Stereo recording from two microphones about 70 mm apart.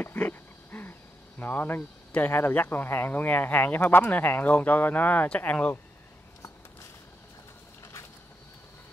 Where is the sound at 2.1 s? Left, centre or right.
Left.